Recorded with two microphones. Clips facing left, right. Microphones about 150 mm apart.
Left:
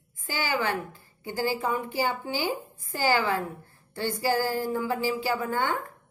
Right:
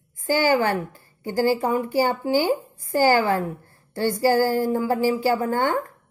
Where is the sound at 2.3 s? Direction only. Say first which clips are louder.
Right 9 dB; 50° right (ahead or behind).